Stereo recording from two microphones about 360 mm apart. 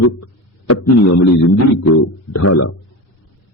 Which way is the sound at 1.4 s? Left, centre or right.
Left.